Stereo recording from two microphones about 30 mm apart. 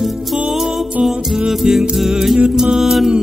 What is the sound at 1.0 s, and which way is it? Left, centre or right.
Music, centre.